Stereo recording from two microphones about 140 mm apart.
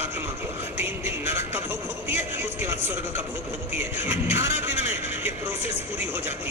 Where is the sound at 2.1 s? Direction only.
15° right (ahead or behind).